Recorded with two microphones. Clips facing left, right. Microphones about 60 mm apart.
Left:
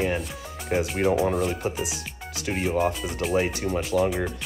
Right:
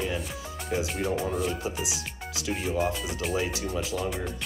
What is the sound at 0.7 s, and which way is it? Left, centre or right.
Speech, left.